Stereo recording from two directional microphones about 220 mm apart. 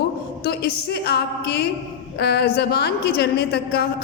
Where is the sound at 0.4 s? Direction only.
45° left (ahead or behind).